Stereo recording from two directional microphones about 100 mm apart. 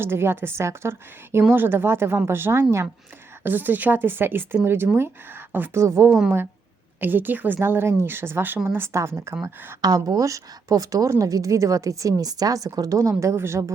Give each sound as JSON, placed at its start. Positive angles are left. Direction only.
{"t": 0.0, "sound": "a woman's voice", "side_deg": -25}
{"t": 6.1, "sound": "speech", "side_deg": -5}
{"t": 7.0, "sound": "a woman's voice", "side_deg": -20}
{"t": 9.8, "sound": "a woman's voice", "side_deg": -40}